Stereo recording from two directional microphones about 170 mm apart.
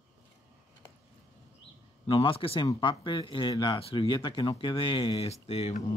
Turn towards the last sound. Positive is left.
turn(degrees=35)  # may be behind; listen again after turning